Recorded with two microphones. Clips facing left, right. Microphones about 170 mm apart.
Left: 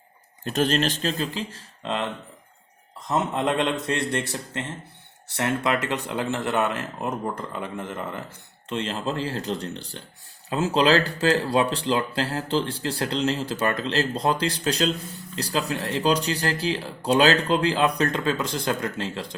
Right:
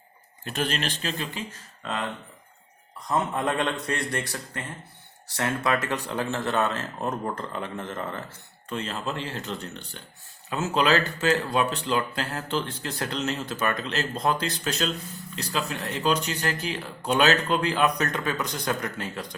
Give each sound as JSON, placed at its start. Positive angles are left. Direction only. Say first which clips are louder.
{"t": 0.4, "sound": "speech", "louder": "left 6 dB", "side_deg": 40}
{"t": 3.1, "sound": "speech", "louder": "left 2 dB", "side_deg": 20}
{"t": 8.7, "sound": "speech", "louder": "left 3 dB", "side_deg": 30}